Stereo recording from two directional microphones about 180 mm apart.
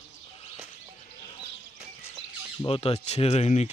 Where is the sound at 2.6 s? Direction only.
35° left (ahead or behind).